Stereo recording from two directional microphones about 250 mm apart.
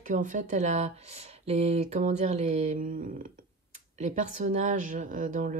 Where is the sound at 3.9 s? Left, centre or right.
Right.